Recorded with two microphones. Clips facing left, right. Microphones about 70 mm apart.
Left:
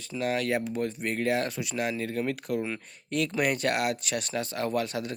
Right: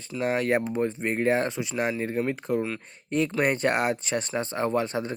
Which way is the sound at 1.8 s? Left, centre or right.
Right.